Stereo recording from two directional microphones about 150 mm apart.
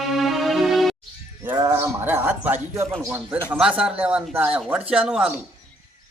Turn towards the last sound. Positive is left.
turn(degrees=-5)  # may be behind; listen again after turning